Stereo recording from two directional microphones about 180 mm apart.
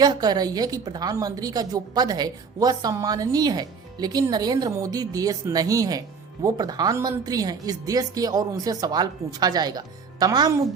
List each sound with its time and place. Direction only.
0.0 s a woman's voice: 20° right (ahead or behind)